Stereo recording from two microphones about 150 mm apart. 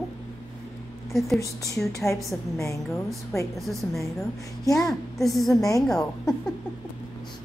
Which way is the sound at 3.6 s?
Centre (ahead or behind).